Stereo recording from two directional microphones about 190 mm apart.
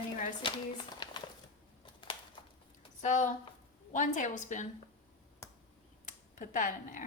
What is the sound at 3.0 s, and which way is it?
A woman's voice, 40° left (ahead or behind).